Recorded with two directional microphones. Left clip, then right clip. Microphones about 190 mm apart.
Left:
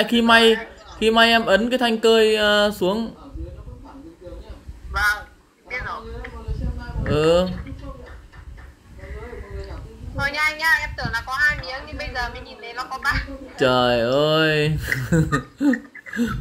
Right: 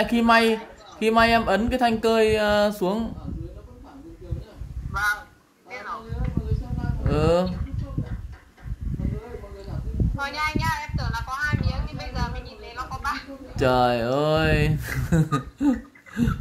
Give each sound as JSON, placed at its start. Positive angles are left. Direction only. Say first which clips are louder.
{"t": 0.0, "sound": "speech", "louder": "left 4 dB", "side_deg": 0}
{"t": 4.9, "sound": "honk", "louder": "left 4 dB", "side_deg": 15}
{"t": 7.1, "sound": "speech", "louder": "left 4 dB", "side_deg": -5}
{"t": 10.1, "sound": "a sound", "louder": "left 5 dB", "side_deg": 15}
{"t": 12.6, "sound": "speech", "louder": "left 5 dB", "side_deg": 15}
{"t": 13.6, "sound": "speech", "louder": "left 3 dB", "side_deg": -5}